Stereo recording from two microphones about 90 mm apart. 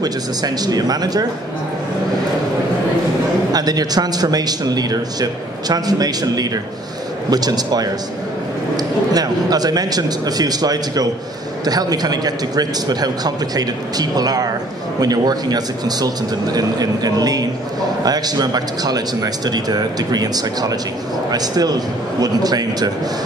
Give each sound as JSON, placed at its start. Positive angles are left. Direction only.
{"t": 0.0, "sound": "a man's voice", "side_deg": -45}
{"t": 3.5, "sound": "a man's voice", "side_deg": -45}